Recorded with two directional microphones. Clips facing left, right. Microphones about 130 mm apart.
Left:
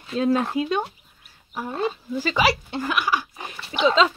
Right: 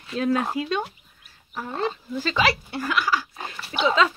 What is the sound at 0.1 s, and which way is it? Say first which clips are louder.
Speech: left 2 dB; 25° left (ahead or behind).